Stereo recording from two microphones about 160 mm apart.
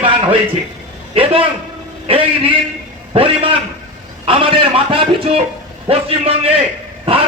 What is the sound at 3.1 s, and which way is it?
Speech, 35° right (ahead or behind).